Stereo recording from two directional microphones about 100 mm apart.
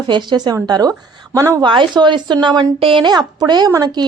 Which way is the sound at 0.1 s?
45° right (ahead or behind).